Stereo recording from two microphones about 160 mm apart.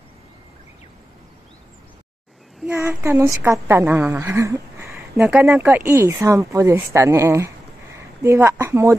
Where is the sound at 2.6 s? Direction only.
10° right (ahead or behind).